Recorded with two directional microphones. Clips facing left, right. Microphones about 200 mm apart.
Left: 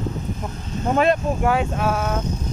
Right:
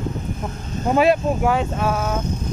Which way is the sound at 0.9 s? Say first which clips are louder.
Right 2 dB; 5° right (ahead or behind).